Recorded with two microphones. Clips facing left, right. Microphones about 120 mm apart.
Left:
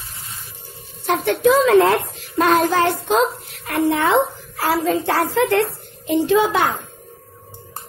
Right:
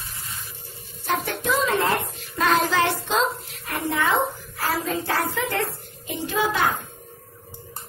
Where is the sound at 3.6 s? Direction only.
70° left (ahead or behind).